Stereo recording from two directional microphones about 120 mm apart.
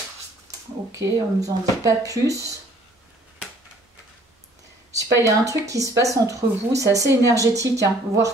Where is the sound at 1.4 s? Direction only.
30° right (ahead or behind).